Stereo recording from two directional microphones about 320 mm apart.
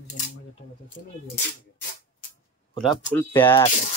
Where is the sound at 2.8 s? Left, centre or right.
Centre.